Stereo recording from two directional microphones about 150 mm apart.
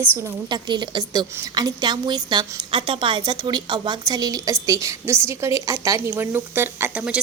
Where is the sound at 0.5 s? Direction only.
30° right (ahead or behind).